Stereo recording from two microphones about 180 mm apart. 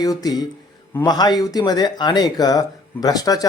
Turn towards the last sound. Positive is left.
turn(degrees=20)  # may be behind; listen again after turning